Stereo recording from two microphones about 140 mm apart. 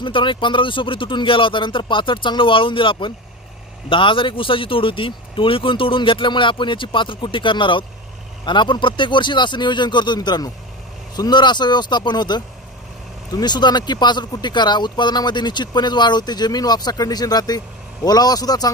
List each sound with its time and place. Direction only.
0.0 s a man's voice: 35° left (ahead or behind)